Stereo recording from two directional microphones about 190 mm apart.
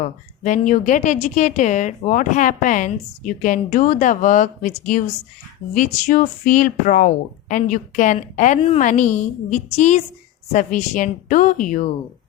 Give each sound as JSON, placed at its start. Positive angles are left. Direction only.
{"t": 0.0, "sound": "a woman's voice", "side_deg": 40}